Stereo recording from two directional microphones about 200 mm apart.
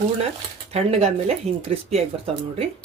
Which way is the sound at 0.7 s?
30° right (ahead or behind).